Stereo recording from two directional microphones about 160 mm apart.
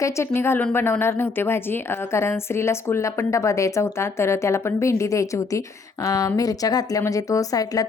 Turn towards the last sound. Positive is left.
turn(degrees=20)  # may be behind; listen again after turning